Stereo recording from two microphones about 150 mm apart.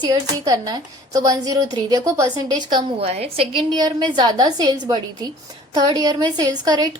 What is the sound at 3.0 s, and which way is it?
A woman's voice, 45° right (ahead or behind).